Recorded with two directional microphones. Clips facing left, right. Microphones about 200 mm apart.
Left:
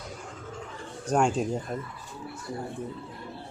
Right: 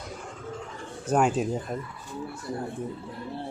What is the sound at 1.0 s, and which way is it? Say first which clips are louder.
Speech: right 1 dB; 5° right (ahead or behind).